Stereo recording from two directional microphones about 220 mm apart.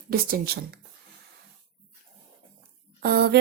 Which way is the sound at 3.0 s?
45° right (ahead or behind).